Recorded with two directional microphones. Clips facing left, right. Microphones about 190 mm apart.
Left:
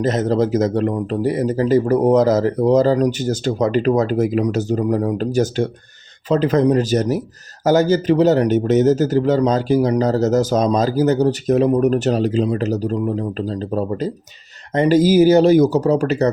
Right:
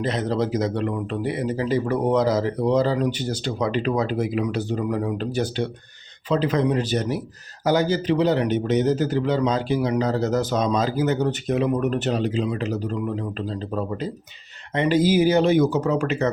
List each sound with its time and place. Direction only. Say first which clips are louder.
0.0 s speech: left 6 dB; 45° left (ahead or behind)